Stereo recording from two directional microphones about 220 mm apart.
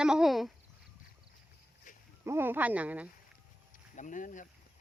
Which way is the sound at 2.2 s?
10° right (ahead or behind).